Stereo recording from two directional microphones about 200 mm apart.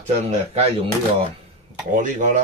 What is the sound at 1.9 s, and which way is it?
Speech, 40° right (ahead or behind).